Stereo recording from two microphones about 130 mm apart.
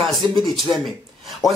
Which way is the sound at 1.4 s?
25° left (ahead or behind).